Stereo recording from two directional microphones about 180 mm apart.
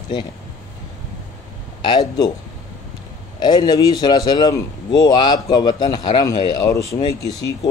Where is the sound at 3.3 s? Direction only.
25° left (ahead or behind).